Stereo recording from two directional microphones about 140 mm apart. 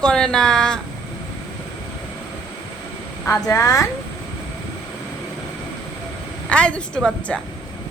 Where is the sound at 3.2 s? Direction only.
20° left (ahead or behind).